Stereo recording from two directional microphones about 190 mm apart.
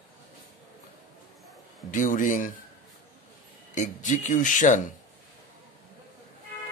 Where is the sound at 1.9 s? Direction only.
45° left (ahead or behind).